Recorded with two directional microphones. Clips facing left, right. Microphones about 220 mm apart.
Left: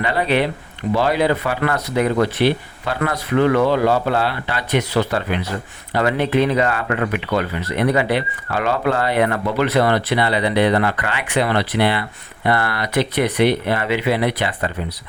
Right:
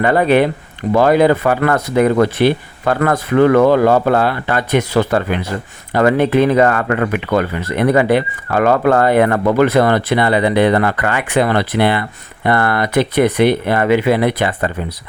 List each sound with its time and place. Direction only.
0.0 s speech: 50° right (ahead or behind)